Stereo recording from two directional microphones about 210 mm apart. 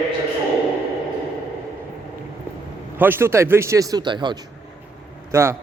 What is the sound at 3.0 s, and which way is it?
A man's voice, 10° right (ahead or behind).